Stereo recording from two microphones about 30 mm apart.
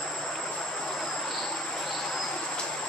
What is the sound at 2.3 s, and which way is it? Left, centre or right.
Train, left.